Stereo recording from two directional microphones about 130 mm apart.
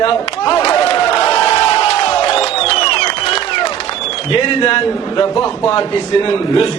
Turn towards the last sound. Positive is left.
turn(degrees=40)  # may be behind; listen again after turning